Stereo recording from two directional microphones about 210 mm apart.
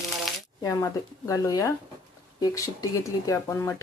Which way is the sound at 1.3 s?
15° left (ahead or behind).